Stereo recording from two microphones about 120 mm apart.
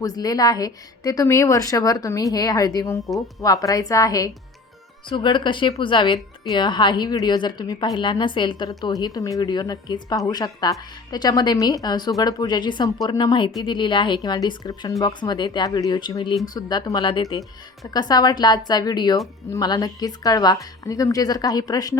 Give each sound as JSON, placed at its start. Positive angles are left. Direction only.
{"t": 0.0, "sound": "a woman's voice", "side_deg": 30}
{"t": 5.0, "sound": "a woman's voice", "side_deg": 40}